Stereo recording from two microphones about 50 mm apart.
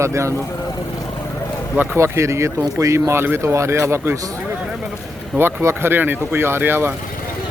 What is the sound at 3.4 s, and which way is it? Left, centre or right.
Speech, right.